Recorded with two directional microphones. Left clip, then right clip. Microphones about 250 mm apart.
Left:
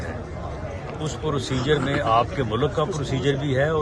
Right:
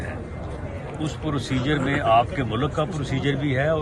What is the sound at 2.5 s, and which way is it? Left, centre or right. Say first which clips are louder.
Speech: left 2 dB; centre.